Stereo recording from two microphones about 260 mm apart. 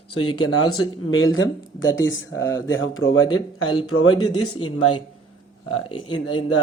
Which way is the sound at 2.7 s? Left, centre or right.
Left.